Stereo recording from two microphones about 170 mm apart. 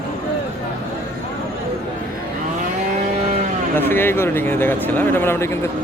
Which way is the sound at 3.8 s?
10° left (ahead or behind).